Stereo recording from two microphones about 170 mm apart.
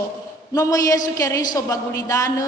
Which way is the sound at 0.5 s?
20° left (ahead or behind).